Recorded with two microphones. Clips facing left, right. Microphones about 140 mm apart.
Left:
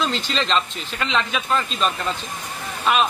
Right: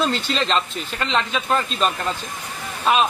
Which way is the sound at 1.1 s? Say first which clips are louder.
Right 1 dB; 35° right (ahead or behind).